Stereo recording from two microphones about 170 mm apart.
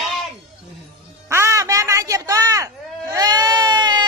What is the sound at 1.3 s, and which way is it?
Speech, 15° right (ahead or behind).